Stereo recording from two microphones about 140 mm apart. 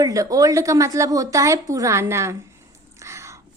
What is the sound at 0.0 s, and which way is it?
A woman's voice, 25° right (ahead or behind).